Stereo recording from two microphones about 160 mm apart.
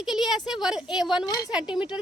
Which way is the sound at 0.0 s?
Centre (ahead or behind).